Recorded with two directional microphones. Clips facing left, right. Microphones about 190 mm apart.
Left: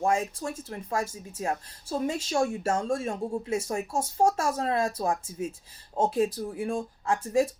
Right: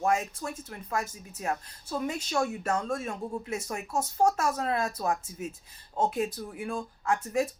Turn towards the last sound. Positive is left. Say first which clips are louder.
# left 3 dB
turn(degrees=30)  # may be behind; listen again after turning